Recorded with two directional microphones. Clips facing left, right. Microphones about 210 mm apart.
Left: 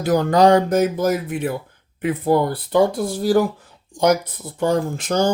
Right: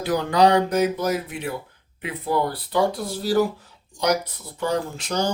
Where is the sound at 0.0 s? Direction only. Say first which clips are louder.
Left 4 dB; 45° left (ahead or behind).